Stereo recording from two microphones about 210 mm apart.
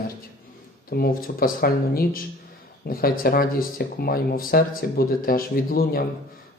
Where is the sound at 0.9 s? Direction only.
45° left (ahead or behind).